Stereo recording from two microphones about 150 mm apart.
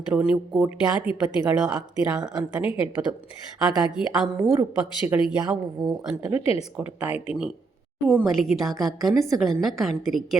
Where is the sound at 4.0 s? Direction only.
Centre (ahead or behind).